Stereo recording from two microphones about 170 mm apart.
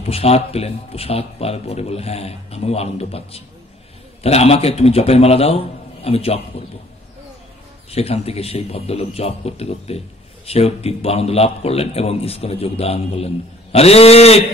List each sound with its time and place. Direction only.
0.0 s a man's voice: 35° left (ahead or behind)
7.9 s a man's voice: 35° left (ahead or behind)